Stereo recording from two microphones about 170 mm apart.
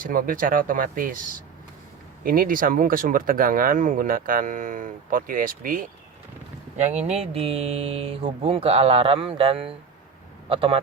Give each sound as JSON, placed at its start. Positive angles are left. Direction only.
{"t": 0.0, "sound": "speech", "side_deg": -55}
{"t": 2.2, "sound": "speech", "side_deg": -55}
{"t": 6.7, "sound": "speech", "side_deg": -40}